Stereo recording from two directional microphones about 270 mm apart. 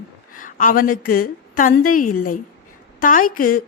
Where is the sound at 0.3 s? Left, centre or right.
Left.